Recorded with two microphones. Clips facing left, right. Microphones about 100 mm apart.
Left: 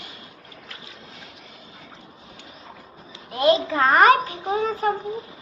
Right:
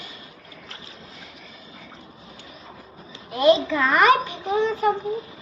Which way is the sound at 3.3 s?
40° left (ahead or behind).